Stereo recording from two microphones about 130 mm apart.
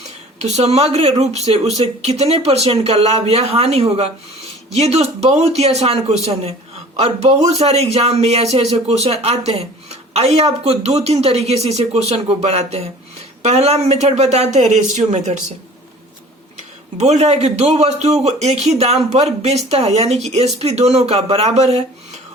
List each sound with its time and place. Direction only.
0.3 s a man's voice: 60° right (ahead or behind)
17.0 s a man's voice: 55° right (ahead or behind)